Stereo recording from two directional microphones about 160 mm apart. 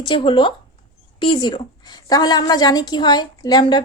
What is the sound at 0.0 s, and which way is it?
Speech, 30° left (ahead or behind).